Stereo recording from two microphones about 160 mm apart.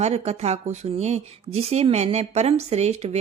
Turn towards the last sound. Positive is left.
turn(degrees=-45)  # may be behind; listen again after turning